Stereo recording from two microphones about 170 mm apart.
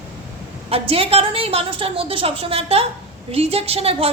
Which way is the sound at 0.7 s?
35° right (ahead or behind).